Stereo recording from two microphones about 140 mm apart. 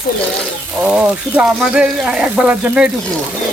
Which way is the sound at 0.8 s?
10° right (ahead or behind).